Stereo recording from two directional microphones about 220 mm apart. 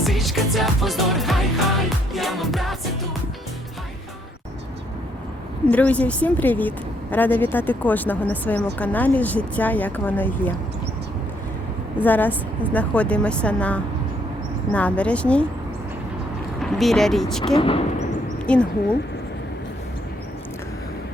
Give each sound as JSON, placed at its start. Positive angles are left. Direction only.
{"t": 0.0, "sound": "music", "side_deg": 0}
{"t": 5.7, "sound": "a woman's voice", "side_deg": 5}
{"t": 11.9, "sound": "a woman's voice", "side_deg": 10}
{"t": 16.6, "sound": "a woman's voice", "side_deg": 0}
{"t": 17.4, "sound": "speech", "side_deg": 20}
{"t": 18.4, "sound": "a woman's voice", "side_deg": 5}